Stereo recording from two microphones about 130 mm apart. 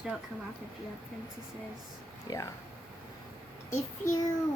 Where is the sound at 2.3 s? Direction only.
30° left (ahead or behind).